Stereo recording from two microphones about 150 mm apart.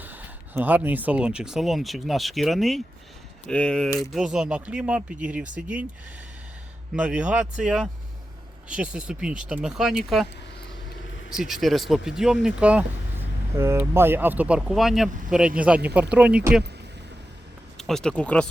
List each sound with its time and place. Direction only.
0.0 s speech: 10° right (ahead or behind); by 3.8 s 5° left (ahead or behind)
3.8 s speech: 20° left (ahead or behind)
4.1 s speech: 5° right (ahead or behind)
6.9 s speech: 10° right (ahead or behind)
11.3 s speech: 5° right (ahead or behind)
17.7 s a sound: centre (ahead or behind)
18.2 s speech: 10° left (ahead or behind)